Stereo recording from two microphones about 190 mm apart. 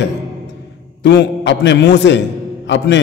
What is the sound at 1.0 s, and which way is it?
A man's voice, 65° left (ahead or behind).